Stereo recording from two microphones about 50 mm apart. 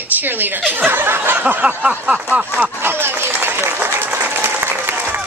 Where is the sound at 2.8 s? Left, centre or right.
Right.